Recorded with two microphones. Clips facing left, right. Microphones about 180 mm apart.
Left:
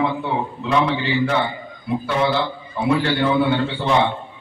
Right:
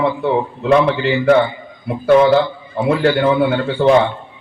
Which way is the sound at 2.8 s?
50° right (ahead or behind).